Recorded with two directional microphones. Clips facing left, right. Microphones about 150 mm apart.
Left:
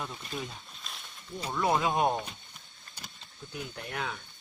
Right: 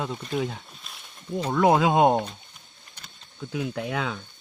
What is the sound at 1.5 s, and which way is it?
Speech, 90° right.